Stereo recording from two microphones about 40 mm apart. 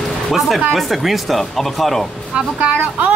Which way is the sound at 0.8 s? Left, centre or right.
Centre.